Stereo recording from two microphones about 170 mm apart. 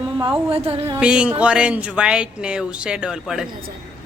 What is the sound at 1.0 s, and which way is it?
Speech, 5° right (ahead or behind).